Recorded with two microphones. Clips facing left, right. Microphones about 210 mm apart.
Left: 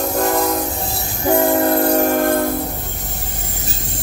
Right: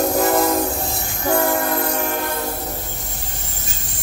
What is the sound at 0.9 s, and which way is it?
Train, 35° left (ahead or behind).